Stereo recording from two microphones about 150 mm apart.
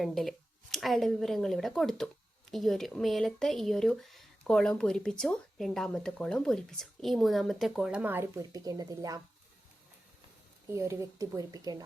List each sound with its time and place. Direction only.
0.0 s speech: centre (ahead or behind); by 9.2 s 25° right (ahead or behind)
10.7 s speech: 20° right (ahead or behind)